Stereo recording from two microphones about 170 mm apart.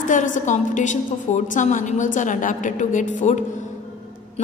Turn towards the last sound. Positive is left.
turn(degrees=45)  # may be behind; listen again after turning